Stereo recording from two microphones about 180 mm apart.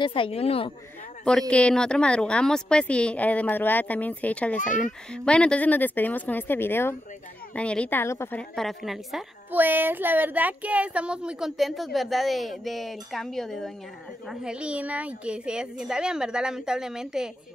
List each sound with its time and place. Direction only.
0.0 s a woman's voice: 30° left (ahead or behind)
1.5 s a woman's voice: 5° left (ahead or behind)
4.6 s a child's voice: 45° left (ahead or behind)
5.1 s a woman's voice: 5° left (ahead or behind)